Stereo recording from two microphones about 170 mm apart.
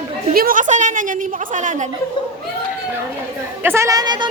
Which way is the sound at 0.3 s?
55° right (ahead or behind).